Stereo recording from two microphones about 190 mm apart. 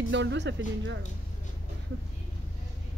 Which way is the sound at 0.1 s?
70° right (ahead or behind).